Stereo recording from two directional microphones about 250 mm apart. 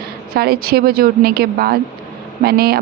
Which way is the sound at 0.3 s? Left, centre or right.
Right.